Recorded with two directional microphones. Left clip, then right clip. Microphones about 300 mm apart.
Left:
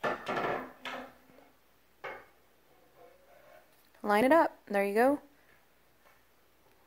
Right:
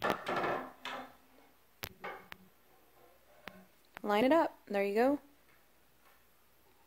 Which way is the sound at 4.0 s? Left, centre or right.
Centre.